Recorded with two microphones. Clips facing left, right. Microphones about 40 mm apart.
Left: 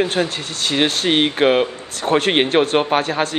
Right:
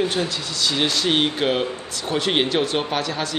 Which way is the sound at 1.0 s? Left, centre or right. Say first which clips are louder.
Left 6 dB; left.